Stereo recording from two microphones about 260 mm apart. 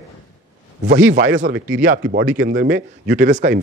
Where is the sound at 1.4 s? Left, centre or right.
Right.